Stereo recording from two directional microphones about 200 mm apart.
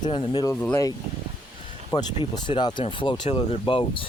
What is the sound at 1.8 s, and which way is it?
Speech, 20° left (ahead or behind).